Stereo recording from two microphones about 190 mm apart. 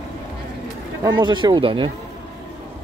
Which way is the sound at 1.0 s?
25° right (ahead or behind).